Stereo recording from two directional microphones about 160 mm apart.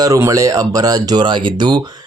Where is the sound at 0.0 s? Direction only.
20° right (ahead or behind).